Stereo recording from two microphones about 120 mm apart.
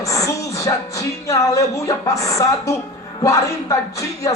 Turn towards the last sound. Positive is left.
turn(degrees=30)  # may be behind; listen again after turning